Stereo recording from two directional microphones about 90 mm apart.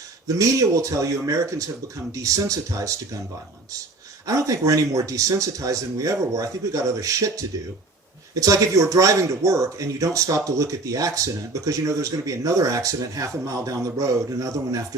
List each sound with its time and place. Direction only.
0.3 s speech: 40° right (ahead or behind)
4.3 s speech: 40° right (ahead or behind)